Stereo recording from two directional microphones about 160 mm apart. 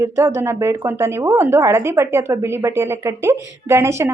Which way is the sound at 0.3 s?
15° right (ahead or behind).